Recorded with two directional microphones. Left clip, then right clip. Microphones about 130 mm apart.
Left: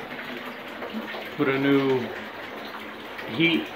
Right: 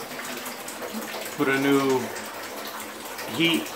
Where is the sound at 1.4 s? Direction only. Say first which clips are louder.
Even; 20° right (ahead or behind).